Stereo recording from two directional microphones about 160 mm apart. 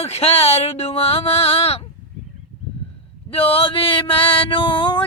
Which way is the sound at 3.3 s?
35° left (ahead or behind).